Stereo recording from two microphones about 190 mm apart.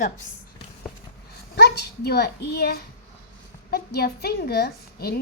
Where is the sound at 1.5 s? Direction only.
60° left (ahead or behind).